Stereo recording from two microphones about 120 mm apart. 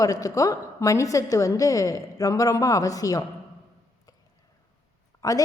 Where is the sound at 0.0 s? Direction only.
30° left (ahead or behind).